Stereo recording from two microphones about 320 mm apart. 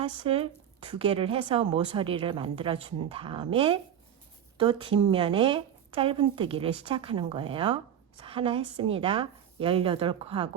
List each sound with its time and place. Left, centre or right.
0.0 s speech: centre